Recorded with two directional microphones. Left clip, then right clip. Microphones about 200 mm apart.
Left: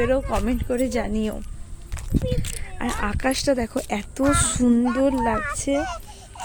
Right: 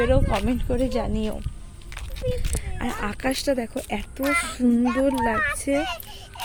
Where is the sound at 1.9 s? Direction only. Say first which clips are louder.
Left 2 dB; 5° left (ahead or behind); by 4.7 s 25° left (ahead or behind).